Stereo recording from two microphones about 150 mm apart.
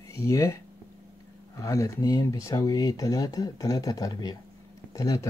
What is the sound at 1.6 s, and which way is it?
Speech, 20° left (ahead or behind).